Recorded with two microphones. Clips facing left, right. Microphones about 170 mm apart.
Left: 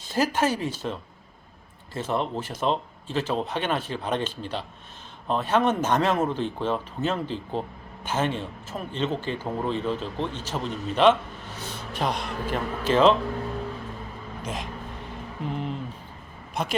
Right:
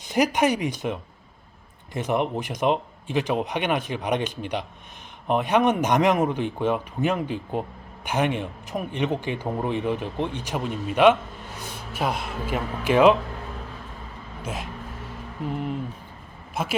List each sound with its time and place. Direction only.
0.0 s a man's voice: 15° right (ahead or behind)
14.4 s speech: 5° right (ahead or behind)
16.6 s speech: 5° right (ahead or behind)